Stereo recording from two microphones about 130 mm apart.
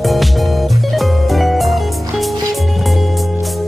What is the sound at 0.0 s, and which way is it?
Music, centre (ahead or behind).